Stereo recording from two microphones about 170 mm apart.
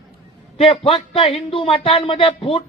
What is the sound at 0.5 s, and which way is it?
A man's voice, 35° left (ahead or behind).